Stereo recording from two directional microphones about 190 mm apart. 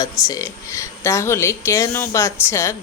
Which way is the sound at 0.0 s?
20° left (ahead or behind).